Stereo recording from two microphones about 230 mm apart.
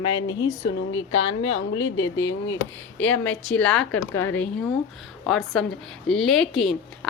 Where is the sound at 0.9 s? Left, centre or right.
Left.